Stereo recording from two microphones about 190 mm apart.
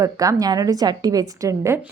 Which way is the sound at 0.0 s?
20° right (ahead or behind).